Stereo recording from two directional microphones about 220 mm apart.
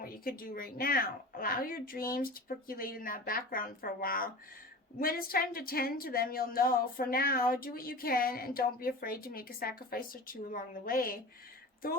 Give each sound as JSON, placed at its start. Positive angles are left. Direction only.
{"t": 0.0, "sound": "a woman's voice", "side_deg": 40}